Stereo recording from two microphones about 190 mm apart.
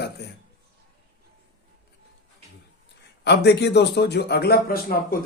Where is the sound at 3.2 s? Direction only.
65° left (ahead or behind).